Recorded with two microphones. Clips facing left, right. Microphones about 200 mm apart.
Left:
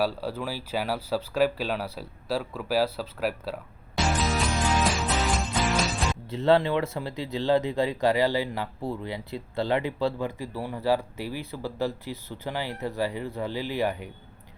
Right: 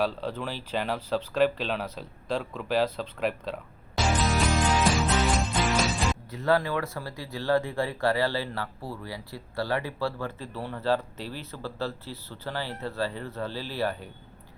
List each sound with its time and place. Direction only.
0.0 s speech: 10° left (ahead or behind)
4.2 s music: centre (ahead or behind)
6.3 s speech: 25° left (ahead or behind)